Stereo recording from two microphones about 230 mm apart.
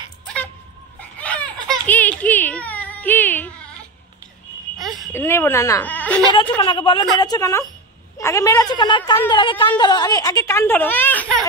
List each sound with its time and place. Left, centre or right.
1.2 s baby laughter: centre
1.9 s whimper: centre
5.1 s a woman's voice: centre
6.5 s a woman's voice: left; by 11.4 s centre